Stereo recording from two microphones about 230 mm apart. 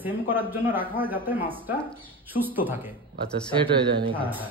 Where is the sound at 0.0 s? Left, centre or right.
Centre.